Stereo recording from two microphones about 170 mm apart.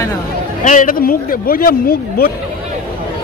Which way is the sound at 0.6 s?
50° left (ahead or behind).